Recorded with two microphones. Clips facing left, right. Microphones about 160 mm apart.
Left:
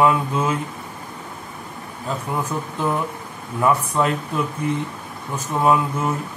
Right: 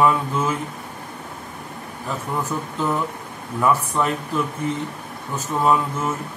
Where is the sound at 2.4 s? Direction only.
15° left (ahead or behind).